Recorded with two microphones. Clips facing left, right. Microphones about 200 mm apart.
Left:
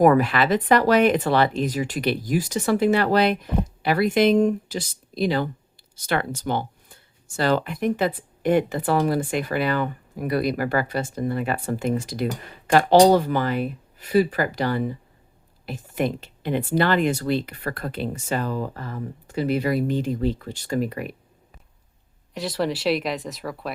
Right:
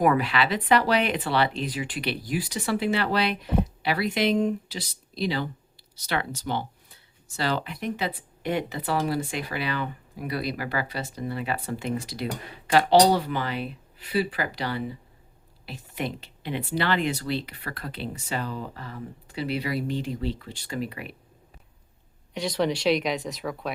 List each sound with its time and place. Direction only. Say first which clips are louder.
0.0 s speech: left 6 dB; 45° left (ahead or behind)
22.4 s speech: even; centre (ahead or behind)